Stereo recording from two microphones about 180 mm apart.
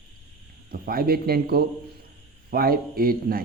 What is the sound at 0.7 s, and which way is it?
Speech, 55° right (ahead or behind).